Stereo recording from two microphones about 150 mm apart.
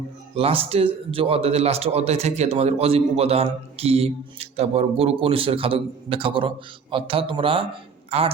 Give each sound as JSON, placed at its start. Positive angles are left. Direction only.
{"t": 0.3, "sound": "speech", "side_deg": -40}